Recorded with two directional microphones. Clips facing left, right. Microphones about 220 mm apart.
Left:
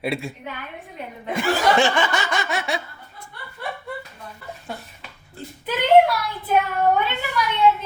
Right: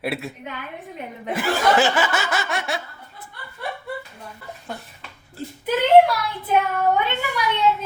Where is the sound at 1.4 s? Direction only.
5° right (ahead or behind).